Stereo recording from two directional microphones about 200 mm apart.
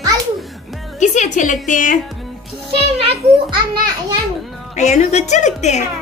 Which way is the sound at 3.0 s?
30° right (ahead or behind).